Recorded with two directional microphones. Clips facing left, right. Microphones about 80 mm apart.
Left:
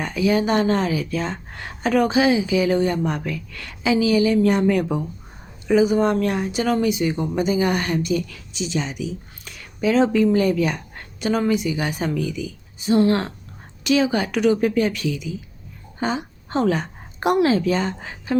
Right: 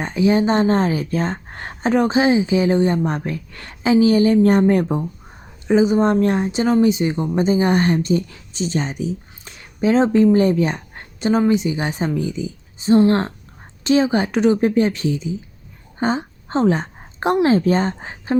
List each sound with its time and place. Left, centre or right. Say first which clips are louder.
0.0 s a woman's voice: right 3 dB; right